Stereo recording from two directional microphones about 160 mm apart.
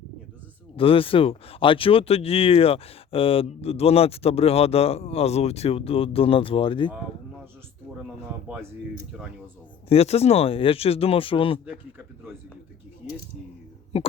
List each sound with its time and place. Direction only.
0.8 s speech: 35° left (ahead or behind)
9.9 s speech: 40° left (ahead or behind)
13.9 s speech: 40° left (ahead or behind)